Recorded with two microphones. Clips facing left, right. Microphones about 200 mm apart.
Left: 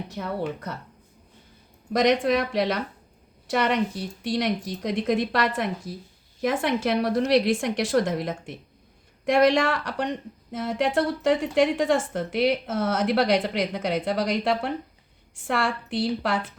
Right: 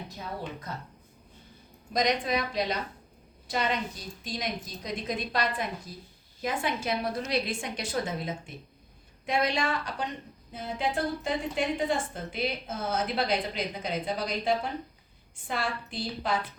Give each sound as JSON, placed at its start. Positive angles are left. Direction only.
{"t": 0.1, "sound": "a woman's voice", "side_deg": 65}
{"t": 1.9, "sound": "a woman's voice", "side_deg": 75}
{"t": 9.2, "sound": "a woman's voice", "side_deg": 85}